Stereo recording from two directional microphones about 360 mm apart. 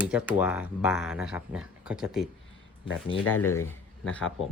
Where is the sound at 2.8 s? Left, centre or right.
Left.